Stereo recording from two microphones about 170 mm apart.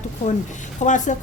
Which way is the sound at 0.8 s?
45° left (ahead or behind).